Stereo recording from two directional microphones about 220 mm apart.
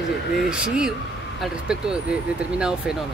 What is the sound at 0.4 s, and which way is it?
Speech, 5° right (ahead or behind).